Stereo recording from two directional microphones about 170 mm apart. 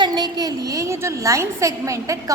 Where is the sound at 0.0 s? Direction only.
25° right (ahead or behind).